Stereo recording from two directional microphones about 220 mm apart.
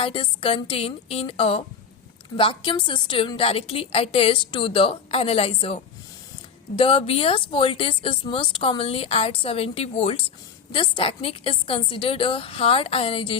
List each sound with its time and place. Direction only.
0.0 s speech: 25° left (ahead or behind)